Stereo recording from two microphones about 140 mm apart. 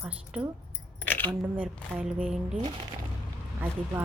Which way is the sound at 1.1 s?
15° left (ahead or behind).